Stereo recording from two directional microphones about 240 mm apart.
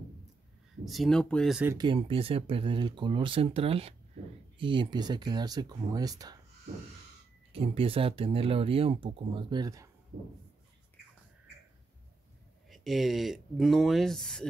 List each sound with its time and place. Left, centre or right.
0.8 s speech: centre
1.8 s speech: right
7.5 s speech: right
10.1 s a sound: right
12.6 s speech: centre